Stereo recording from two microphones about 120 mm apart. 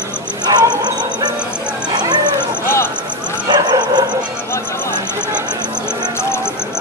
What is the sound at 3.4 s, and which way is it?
Bow-wow, 35° right (ahead or behind).